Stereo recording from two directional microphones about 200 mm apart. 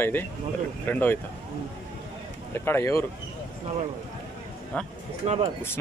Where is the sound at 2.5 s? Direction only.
10° left (ahead or behind).